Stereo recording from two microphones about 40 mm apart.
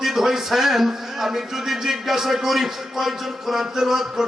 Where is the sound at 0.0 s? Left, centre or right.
Centre.